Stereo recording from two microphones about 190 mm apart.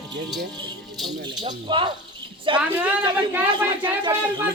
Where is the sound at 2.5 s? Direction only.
25° right (ahead or behind).